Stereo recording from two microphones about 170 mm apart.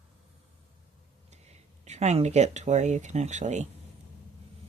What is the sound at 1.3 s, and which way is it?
Speech, 40° right (ahead or behind).